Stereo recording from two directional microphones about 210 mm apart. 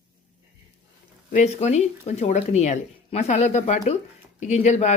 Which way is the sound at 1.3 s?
35° left (ahead or behind).